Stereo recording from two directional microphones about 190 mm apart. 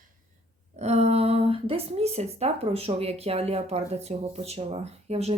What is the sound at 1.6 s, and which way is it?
Speech, 30° right (ahead or behind).